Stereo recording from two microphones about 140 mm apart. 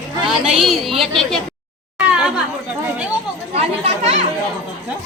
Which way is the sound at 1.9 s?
5° right (ahead or behind).